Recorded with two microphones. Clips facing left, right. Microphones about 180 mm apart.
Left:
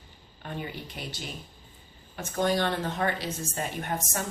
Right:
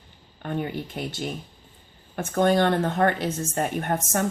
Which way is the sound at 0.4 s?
55° right (ahead or behind).